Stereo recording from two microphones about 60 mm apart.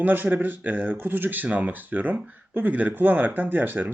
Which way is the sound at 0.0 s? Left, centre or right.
Right.